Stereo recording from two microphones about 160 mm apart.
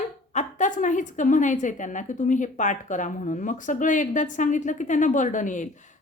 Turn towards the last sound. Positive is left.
turn(degrees=50)  # may be behind; listen again after turning